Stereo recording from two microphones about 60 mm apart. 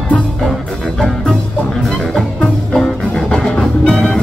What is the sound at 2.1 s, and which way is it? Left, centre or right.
Music, centre.